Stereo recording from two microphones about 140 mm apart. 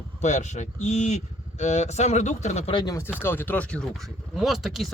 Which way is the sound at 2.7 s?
25° left (ahead or behind).